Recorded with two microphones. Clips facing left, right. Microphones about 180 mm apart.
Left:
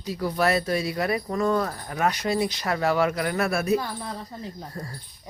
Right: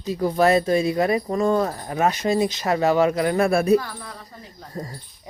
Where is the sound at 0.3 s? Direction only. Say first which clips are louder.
Right 5 dB; 25° right (ahead or behind).